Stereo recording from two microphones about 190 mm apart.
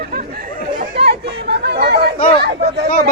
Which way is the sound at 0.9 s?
60° right (ahead or behind).